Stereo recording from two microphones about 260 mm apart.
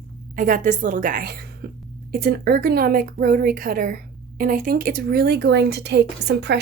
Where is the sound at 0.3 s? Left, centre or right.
Right.